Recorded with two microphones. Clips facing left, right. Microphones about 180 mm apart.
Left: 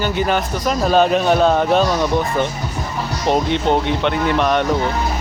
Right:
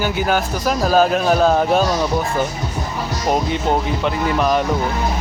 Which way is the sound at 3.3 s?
5° right (ahead or behind).